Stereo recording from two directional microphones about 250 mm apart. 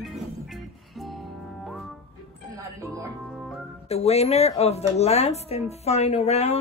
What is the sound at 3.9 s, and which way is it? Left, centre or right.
Speech, left.